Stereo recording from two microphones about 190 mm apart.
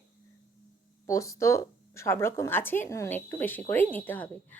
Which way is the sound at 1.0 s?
15° left (ahead or behind).